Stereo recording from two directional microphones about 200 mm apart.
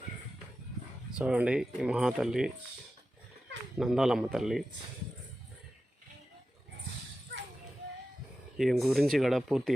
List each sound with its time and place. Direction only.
1.2 s speech: 5° right (ahead or behind)
3.8 s speech: centre (ahead or behind)
8.5 s speech: centre (ahead or behind)